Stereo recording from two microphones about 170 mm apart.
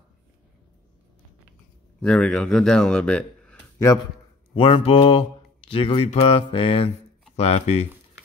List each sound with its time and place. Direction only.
2.0 s speech: 5° left (ahead or behind)
4.6 s speech: 30° left (ahead or behind)